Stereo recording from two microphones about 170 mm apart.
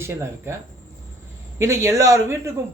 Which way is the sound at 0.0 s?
15° right (ahead or behind).